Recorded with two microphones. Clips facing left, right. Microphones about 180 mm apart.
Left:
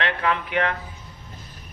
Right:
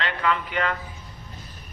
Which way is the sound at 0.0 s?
60° left (ahead or behind).